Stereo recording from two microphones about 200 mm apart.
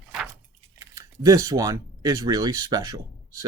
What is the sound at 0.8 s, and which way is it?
Speech, 20° right (ahead or behind).